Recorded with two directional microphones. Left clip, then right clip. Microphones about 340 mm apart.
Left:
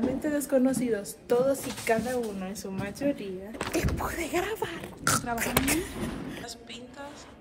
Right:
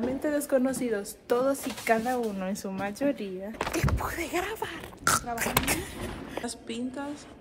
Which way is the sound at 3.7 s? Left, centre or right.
Centre.